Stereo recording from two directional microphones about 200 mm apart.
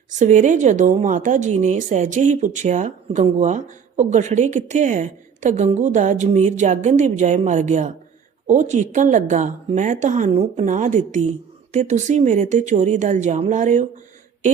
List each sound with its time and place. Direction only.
0.2 s speech: 40° right (ahead or behind)